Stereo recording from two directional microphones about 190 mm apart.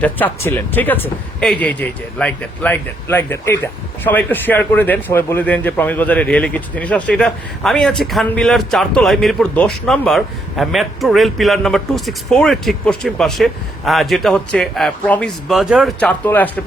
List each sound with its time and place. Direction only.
0.0 s speech: 10° left (ahead or behind)